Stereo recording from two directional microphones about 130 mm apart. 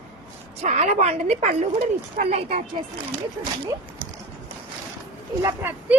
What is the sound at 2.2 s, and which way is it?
Speech, 90° right.